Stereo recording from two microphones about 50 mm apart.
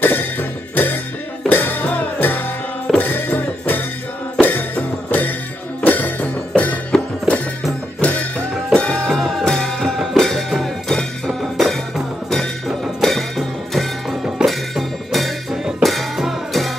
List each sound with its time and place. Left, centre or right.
0.0 s music: left
8.7 s music: centre
9.1 s music: centre
13.0 s music: centre